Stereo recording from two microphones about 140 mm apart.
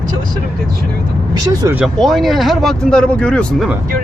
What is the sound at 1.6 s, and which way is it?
Speech, 25° right (ahead or behind).